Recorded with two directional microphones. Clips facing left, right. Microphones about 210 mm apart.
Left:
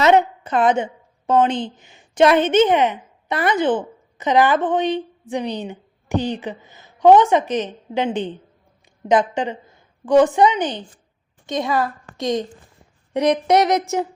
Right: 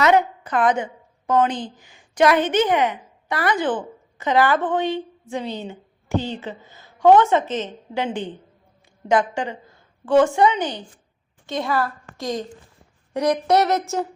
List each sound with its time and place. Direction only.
0.0 s a woman's voice: 25° left (ahead or behind)